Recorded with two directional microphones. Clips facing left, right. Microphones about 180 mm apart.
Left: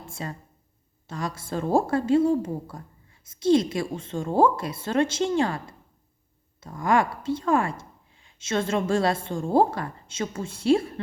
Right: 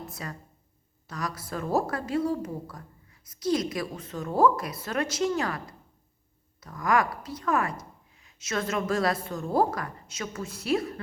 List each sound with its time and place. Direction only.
0.0 s a woman's voice: 25° left (ahead or behind)